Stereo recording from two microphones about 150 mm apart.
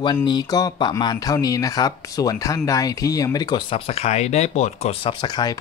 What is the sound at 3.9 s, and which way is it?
Speech, 45° left (ahead or behind).